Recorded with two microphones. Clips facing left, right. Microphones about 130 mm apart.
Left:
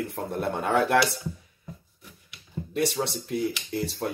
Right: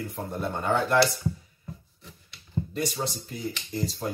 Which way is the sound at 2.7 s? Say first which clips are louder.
Left 5 dB; 65° left (ahead or behind).